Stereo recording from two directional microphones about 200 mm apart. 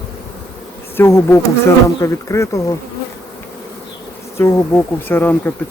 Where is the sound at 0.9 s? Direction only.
10° left (ahead or behind).